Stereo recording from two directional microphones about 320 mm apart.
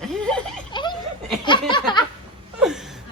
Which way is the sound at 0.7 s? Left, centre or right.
Centre.